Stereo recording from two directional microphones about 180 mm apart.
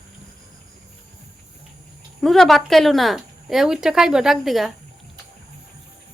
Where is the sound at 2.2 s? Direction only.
Centre (ahead or behind).